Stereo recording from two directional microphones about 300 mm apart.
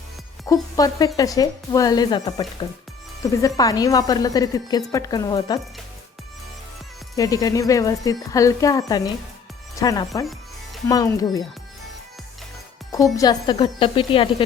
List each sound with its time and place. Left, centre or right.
0.4 s speech: centre
7.2 s speech: centre
13.1 s speech: centre